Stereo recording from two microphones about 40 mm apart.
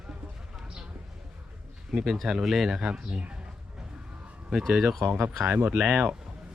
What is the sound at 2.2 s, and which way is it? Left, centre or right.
Speech, centre.